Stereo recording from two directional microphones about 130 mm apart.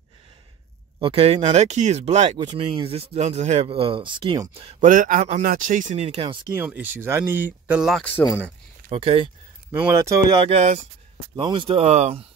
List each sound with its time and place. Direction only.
0.9 s speech: 45° right (ahead or behind)
2.3 s speech: 40° right (ahead or behind)
4.7 s a man's voice: 85° right
6.0 s speech: 45° right (ahead or behind)
6.5 s speech: 10° right (ahead or behind)
7.9 s speech: 5° left (ahead or behind)
8.9 s speech: 45° right (ahead or behind)
9.8 s speech: 20° right (ahead or behind)
10.5 s speech: 60° right (ahead or behind)
11.3 s speech: 40° right (ahead or behind)